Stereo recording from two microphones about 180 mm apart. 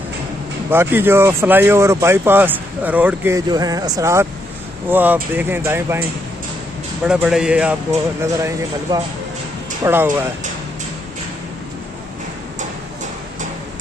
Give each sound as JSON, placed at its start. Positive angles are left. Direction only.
{"t": 0.7, "sound": "speech", "side_deg": -10}
{"t": 7.1, "sound": "speech", "side_deg": -5}